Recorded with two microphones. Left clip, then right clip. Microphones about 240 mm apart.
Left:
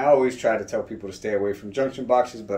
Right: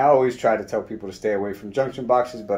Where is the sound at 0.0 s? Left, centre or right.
Right.